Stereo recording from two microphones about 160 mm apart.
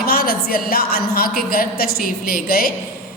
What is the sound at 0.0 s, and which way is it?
A woman's voice, 70° left (ahead or behind).